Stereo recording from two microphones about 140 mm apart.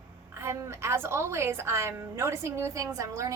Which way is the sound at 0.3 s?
20° right (ahead or behind).